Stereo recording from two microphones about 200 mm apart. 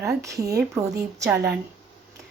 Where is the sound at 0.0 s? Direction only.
15° right (ahead or behind).